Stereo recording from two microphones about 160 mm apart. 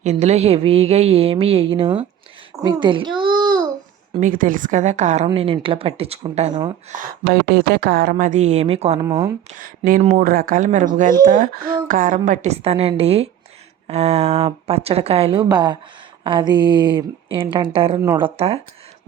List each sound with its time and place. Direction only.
0.0 s a woman's voice: 45° right (ahead or behind); by 3.6 s 25° right (ahead or behind)
4.2 s a woman's voice: 60° right (ahead or behind); by 6.5 s 40° right (ahead or behind)
6.9 s speech: 65° right (ahead or behind)
8.1 s a woman's voice: 50° right (ahead or behind)
9.0 s speech: 20° right (ahead or behind)
9.5 s speech: 60° right (ahead or behind)
10.0 s a woman's voice: 45° right (ahead or behind)
10.2 s a woman's voice: 65° right (ahead or behind); by 18.6 s 40° right (ahead or behind)